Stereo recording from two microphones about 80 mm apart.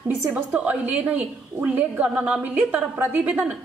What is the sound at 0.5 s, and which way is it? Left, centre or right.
A woman's voice, centre.